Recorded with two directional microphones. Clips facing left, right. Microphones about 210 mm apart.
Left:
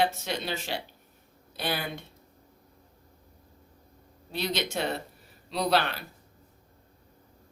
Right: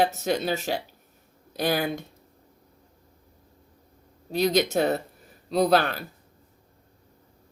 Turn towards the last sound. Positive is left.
turn(degrees=-45)  # may be behind; listen again after turning